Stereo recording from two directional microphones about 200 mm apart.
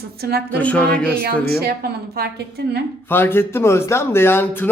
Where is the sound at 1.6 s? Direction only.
55° right (ahead or behind).